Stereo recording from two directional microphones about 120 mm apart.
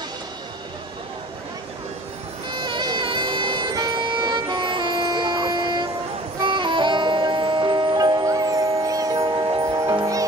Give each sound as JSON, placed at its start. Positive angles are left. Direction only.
{"t": 2.5, "sound": "music", "side_deg": -40}
{"t": 3.7, "sound": "vehicle", "side_deg": -35}
{"t": 6.4, "sound": "music", "side_deg": -45}